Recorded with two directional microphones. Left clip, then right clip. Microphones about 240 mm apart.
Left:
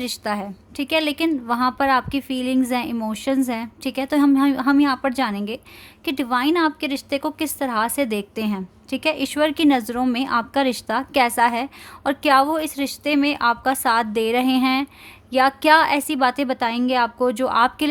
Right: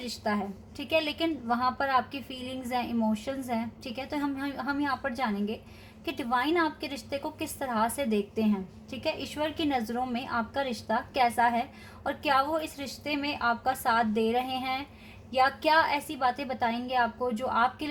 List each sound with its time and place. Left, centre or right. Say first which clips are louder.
0.8 s a woman's voice: left 7 dB; left